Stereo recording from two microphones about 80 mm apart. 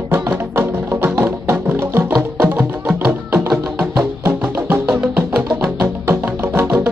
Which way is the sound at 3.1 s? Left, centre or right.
Right.